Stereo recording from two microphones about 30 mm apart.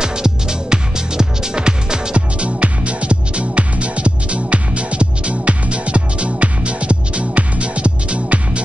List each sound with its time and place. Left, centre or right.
0.0 s music: right
2.1 s music: right